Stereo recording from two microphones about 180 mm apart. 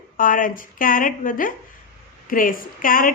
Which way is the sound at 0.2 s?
50° left (ahead or behind).